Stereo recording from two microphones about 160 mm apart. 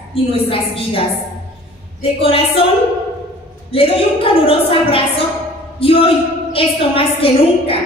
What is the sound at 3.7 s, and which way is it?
A woman's voice, 35° left (ahead or behind).